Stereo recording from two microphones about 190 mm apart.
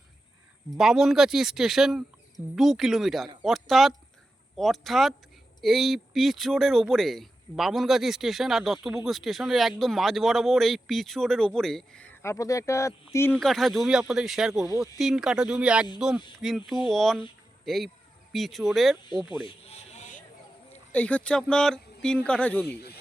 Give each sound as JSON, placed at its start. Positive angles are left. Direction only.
{"t": 0.8, "sound": "speech", "side_deg": 0}
{"t": 13.3, "sound": "speech", "side_deg": 0}
{"t": 19.5, "sound": "a sound", "side_deg": 35}
{"t": 20.9, "sound": "speech", "side_deg": 10}